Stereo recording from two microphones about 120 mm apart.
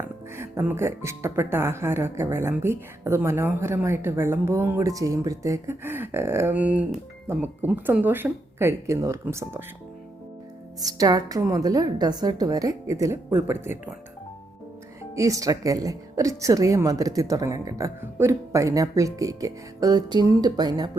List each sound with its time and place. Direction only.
0.3 s speech: 20° right (ahead or behind)
10.8 s a woman's voice: 30° right (ahead or behind)
15.1 s speech: 30° right (ahead or behind)